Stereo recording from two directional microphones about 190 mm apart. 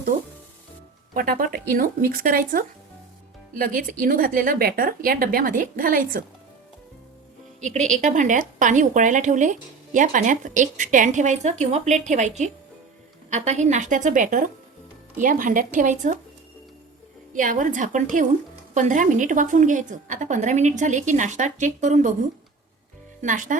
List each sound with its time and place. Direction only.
1.1 s speech: 50° right (ahead or behind)
7.6 s a woman's voice: 40° right (ahead or behind)
17.3 s a woman's voice: 45° right (ahead or behind)
23.2 s speech: 45° right (ahead or behind)